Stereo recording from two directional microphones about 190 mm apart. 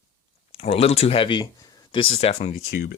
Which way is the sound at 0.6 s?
30° left (ahead or behind).